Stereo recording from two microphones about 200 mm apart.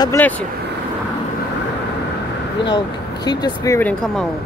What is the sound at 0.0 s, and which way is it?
Speech, 15° left (ahead or behind).